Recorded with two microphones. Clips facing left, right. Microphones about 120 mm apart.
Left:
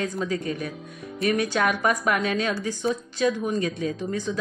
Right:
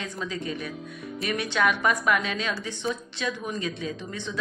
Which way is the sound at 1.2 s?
40° left (ahead or behind).